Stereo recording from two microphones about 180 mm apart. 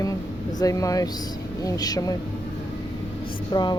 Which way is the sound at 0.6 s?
20° left (ahead or behind).